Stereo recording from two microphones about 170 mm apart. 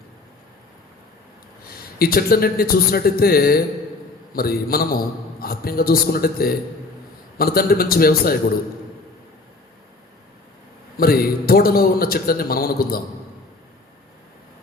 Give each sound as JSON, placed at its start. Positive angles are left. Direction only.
{"t": 1.6, "sound": "a man's voice", "side_deg": 60}
{"t": 10.9, "sound": "a man's voice", "side_deg": 60}